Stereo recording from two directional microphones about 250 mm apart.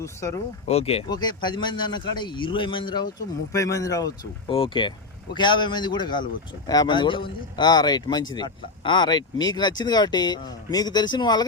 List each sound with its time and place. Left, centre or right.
0.0 s speech: centre
0.7 s a man's voice: left